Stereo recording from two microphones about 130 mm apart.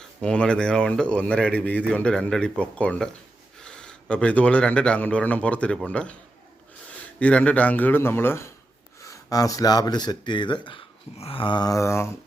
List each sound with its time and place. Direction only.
0.0 s speech: 5° left (ahead or behind)
7.2 s speech: 10° left (ahead or behind)